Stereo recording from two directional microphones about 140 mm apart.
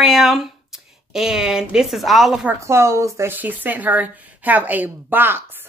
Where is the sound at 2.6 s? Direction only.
20° right (ahead or behind).